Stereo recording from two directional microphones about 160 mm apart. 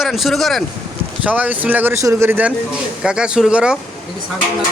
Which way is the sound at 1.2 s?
10° right (ahead or behind).